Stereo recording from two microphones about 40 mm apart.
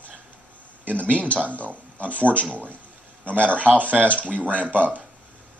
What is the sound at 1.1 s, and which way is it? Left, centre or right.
Speech, right.